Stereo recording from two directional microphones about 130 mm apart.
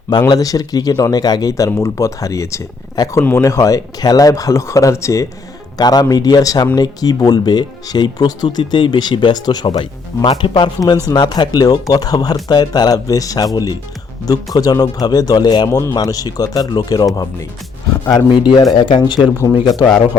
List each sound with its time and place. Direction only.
0.1 s speech: 30° left (ahead or behind)
18.3 s speech: 40° left (ahead or behind)